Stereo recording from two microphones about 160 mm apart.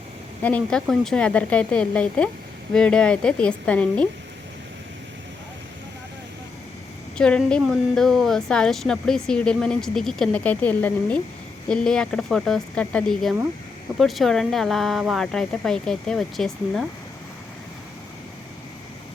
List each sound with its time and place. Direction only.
0.4 s speech: 5° left (ahead or behind)
7.2 s speech: 5° left (ahead or behind)